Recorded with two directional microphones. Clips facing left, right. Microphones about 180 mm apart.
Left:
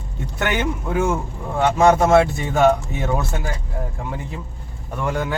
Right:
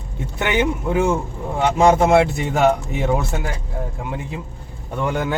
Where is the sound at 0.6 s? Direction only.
15° right (ahead or behind).